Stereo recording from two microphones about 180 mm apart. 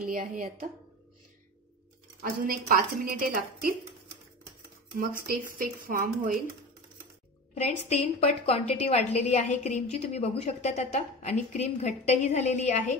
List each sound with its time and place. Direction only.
0.0 s a woman's voice: 50° right (ahead or behind)
2.2 s a woman's voice: 50° right (ahead or behind)
4.9 s a woman's voice: 50° right (ahead or behind)
7.5 s a woman's voice: 40° left (ahead or behind)